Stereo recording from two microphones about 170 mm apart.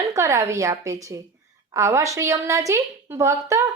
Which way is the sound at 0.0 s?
20° right (ahead or behind).